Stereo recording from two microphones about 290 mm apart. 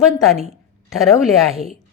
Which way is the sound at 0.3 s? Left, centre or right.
Right.